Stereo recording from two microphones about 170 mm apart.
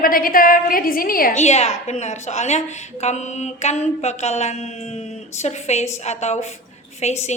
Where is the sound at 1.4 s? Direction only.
40° left (ahead or behind).